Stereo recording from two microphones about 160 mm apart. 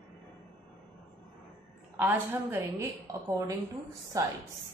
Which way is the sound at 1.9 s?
15° right (ahead or behind).